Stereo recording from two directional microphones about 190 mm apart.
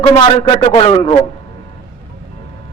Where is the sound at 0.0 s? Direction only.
30° left (ahead or behind).